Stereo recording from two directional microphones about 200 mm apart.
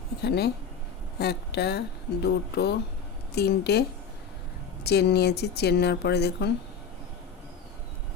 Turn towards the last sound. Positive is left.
turn(degrees=55)  # may be behind; listen again after turning